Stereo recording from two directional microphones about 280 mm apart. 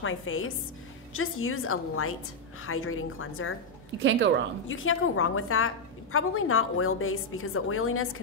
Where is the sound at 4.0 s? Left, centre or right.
Right.